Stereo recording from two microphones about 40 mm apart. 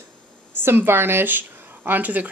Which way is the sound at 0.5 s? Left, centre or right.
Right.